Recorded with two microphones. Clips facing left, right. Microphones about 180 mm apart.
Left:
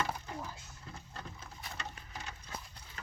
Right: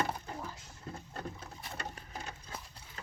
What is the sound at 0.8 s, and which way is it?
Patter, 40° right (ahead or behind).